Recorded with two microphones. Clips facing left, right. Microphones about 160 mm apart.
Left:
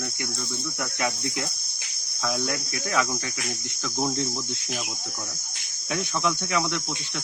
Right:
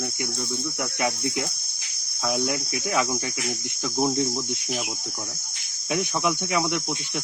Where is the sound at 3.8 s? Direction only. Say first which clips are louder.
Right 4 dB; 15° right (ahead or behind).